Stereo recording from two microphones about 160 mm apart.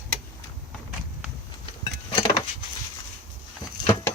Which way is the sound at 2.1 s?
25° left (ahead or behind).